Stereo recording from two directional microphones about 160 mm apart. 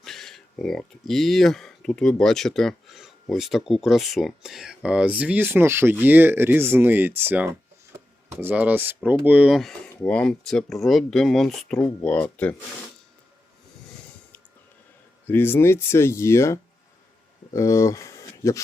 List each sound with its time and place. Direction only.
0.0 s speech: centre (ahead or behind)
15.3 s speech: 15° left (ahead or behind)